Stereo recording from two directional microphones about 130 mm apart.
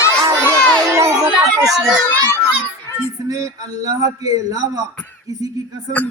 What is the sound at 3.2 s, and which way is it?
A man's voice, 30° right (ahead or behind).